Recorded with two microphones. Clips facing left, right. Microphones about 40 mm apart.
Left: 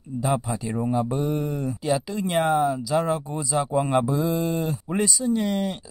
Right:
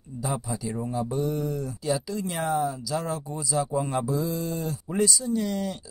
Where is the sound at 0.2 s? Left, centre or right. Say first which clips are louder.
Left 5 dB; left.